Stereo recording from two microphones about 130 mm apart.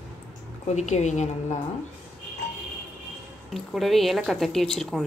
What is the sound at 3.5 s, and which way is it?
A woman's voice, centre (ahead or behind).